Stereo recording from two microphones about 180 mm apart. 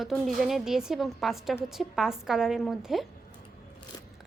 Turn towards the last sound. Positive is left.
turn(degrees=0)  # may be behind; listen again after turning